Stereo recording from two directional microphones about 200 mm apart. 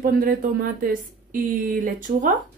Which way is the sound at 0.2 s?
45° right (ahead or behind).